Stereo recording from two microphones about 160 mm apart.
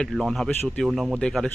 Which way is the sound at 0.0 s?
Centre (ahead or behind).